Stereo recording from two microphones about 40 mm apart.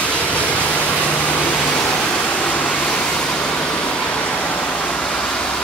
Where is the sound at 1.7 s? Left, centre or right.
Left.